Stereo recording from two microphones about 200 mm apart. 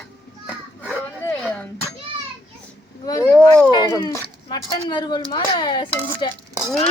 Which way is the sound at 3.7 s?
20° left (ahead or behind).